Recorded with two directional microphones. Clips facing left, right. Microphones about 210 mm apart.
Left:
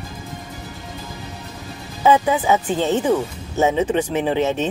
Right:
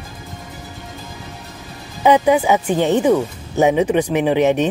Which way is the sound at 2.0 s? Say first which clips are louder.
Right 3 dB; 15° right (ahead or behind).